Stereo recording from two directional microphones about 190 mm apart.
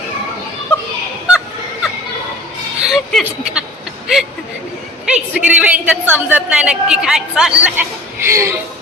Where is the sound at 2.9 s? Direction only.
Centre (ahead or behind).